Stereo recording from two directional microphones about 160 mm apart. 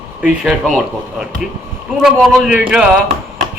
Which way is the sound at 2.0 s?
5° right (ahead or behind).